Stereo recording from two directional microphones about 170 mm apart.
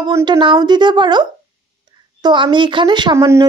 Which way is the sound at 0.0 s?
25° right (ahead or behind).